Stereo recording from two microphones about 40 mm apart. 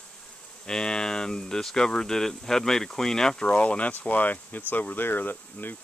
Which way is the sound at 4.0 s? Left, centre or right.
Left.